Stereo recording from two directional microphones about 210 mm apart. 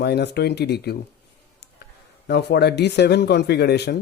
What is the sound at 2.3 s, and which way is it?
Speech, 50° left (ahead or behind).